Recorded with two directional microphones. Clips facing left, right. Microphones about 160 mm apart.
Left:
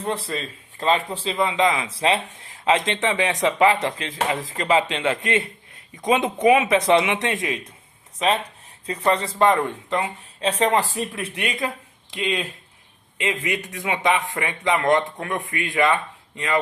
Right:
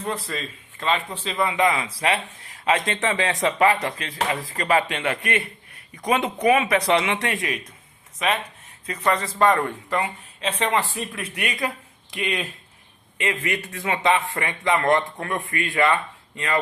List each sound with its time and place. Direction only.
0.0 s a man's voice: 30° left (ahead or behind)
1.4 s a man's voice: 20° left (ahead or behind)
10.4 s a man's voice: 40° left (ahead or behind); by 16.6 s 20° left (ahead or behind)